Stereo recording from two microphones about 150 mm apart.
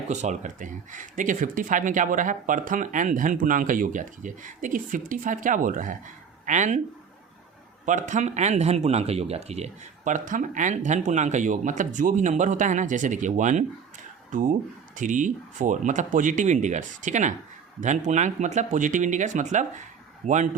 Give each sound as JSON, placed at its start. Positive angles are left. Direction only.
{"t": 0.1, "sound": "speech", "side_deg": -50}
{"t": 7.9, "sound": "speech", "side_deg": -55}